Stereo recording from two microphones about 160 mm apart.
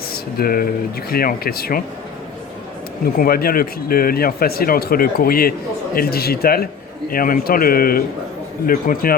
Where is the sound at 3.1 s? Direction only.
70° left (ahead or behind).